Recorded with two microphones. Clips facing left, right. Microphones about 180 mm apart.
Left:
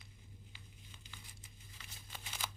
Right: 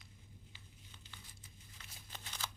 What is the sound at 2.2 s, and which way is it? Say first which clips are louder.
Shuffling cards: left 1 dB; 10° left (ahead or behind).